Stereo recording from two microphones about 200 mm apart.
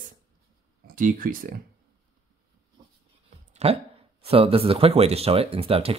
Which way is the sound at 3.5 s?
30° right (ahead or behind).